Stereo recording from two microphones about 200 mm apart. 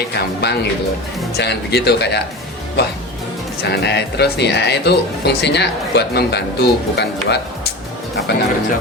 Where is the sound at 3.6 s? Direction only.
55° left (ahead or behind).